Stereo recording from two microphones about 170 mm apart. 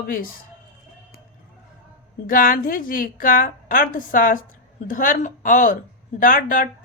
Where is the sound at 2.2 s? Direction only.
55° left (ahead or behind).